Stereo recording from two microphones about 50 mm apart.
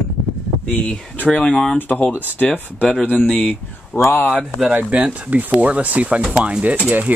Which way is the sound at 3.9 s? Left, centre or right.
Left.